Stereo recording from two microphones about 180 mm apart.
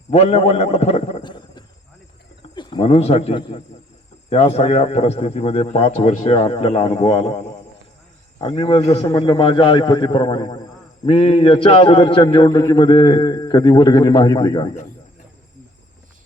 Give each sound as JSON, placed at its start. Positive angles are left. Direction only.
{"t": 0.1, "sound": "a man's voice", "side_deg": 35}
{"t": 1.2, "sound": "a sound", "side_deg": 25}
{"t": 2.6, "sound": "a man's voice", "side_deg": 25}